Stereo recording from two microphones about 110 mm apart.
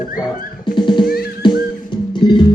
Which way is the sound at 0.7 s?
45° left (ahead or behind).